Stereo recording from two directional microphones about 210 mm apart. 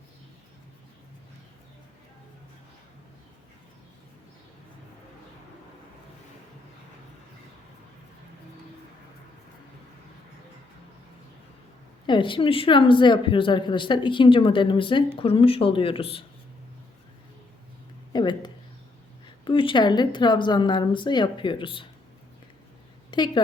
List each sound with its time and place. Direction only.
12.0 s speech: 25° left (ahead or behind)
18.1 s a sound: 20° left (ahead or behind)
19.2 s speech: 25° left (ahead or behind)
23.1 s a woman's voice: 20° left (ahead or behind)